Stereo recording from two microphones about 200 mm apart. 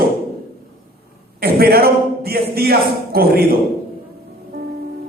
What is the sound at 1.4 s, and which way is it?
A man's voice, 50° right (ahead or behind).